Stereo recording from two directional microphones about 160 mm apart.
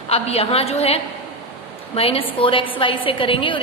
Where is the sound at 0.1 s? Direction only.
40° left (ahead or behind).